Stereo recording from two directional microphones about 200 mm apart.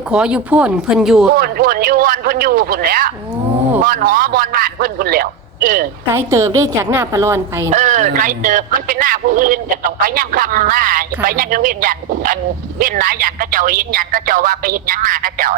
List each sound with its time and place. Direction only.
0.1 s speech: 5° right (ahead or behind)
1.4 s speech: 45° right (ahead or behind)
6.1 s a woman's voice: 15° right (ahead or behind)
7.7 s speech: 35° right (ahead or behind)